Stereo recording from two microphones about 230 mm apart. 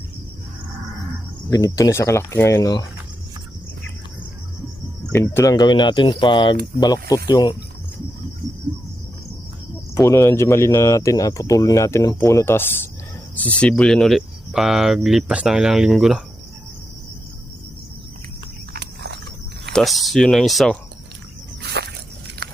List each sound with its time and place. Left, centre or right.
1.5 s speech: centre
5.1 s speech: centre
9.9 s speech: centre
18.7 s a sound: right
19.7 s speech: centre
21.6 s a sound: right